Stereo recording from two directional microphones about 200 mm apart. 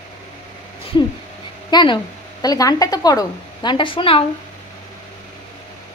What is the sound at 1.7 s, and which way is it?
A woman's voice, 20° left (ahead or behind).